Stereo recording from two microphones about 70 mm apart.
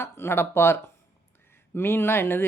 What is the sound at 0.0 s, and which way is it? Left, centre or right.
Speech, left.